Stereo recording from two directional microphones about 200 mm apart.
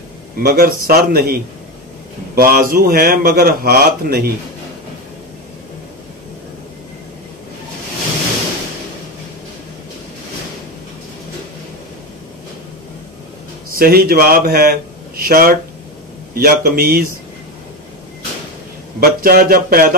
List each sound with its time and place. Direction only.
0.4 s a man's voice: 45° right (ahead or behind)
13.7 s a man's voice: 50° right (ahead or behind)
18.9 s a man's voice: 50° right (ahead or behind)